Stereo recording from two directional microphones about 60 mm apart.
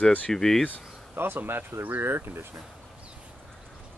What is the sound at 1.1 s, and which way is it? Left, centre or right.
Speech, right.